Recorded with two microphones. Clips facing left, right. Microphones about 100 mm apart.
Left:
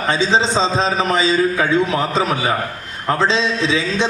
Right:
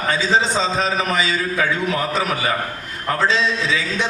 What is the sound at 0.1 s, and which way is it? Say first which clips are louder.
A man's voice: left 2 dB; 25° left (ahead or behind).